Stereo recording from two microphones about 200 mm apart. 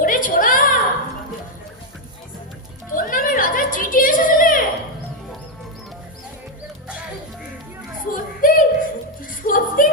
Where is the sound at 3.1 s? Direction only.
45° left (ahead or behind).